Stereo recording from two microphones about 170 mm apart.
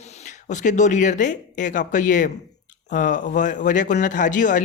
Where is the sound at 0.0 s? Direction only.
40° left (ahead or behind).